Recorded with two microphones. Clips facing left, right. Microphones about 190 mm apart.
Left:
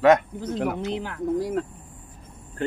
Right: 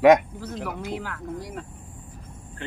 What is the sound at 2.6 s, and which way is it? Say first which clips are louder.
Speech: left 10 dB; 40° left (ahead or behind).